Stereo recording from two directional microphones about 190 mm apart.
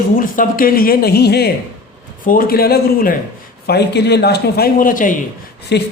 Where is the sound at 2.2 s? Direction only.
45° left (ahead or behind).